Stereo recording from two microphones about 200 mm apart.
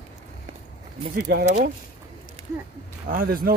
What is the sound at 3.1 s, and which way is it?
Speech, 45° right (ahead or behind).